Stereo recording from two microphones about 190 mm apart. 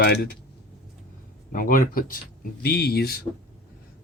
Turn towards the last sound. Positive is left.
turn(degrees=55)  # may be behind; listen again after turning